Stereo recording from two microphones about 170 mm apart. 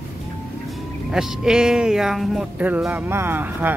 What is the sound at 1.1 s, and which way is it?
Speech, 5° right (ahead or behind).